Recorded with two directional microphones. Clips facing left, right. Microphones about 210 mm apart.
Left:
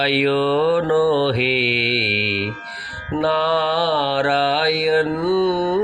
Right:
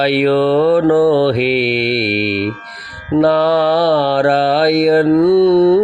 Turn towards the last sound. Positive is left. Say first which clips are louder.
# right 9 dB
turn(degrees=-40)  # may be behind; listen again after turning